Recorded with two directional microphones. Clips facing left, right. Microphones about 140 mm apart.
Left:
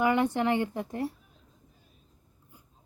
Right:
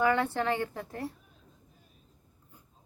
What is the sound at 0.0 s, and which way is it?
Speech, 15° left (ahead or behind).